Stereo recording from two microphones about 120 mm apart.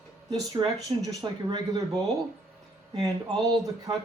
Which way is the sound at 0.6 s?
30° right (ahead or behind).